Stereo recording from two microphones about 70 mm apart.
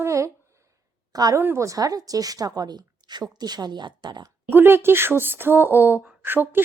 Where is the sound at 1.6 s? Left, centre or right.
Right.